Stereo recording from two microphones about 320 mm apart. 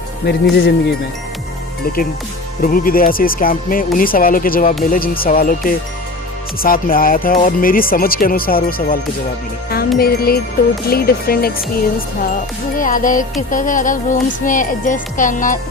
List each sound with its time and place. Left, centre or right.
0.3 s speech: left
2.6 s speech: left
10.0 s speech: left